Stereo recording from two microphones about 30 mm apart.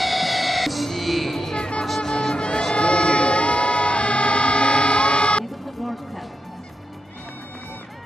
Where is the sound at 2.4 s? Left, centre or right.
Left.